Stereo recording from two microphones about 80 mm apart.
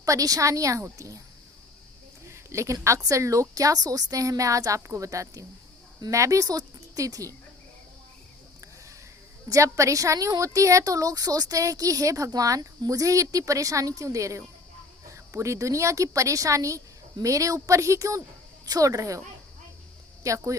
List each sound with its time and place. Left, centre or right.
0.0 s a woman's voice: right
2.3 s a woman's voice: right
9.5 s a woman's voice: right
20.2 s speech: right